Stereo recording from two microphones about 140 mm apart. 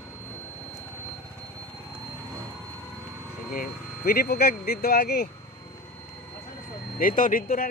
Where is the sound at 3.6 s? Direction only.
90° left.